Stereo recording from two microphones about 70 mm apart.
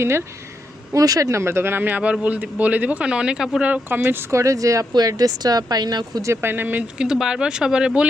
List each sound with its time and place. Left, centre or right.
0.0 s speech: right
0.9 s speech: right
1.3 s speech: right
1.9 s a man's voice: centre
3.8 s speech: right
4.3 s speech: right
4.9 s speech: right
6.2 s speech: right
7.0 s speech: centre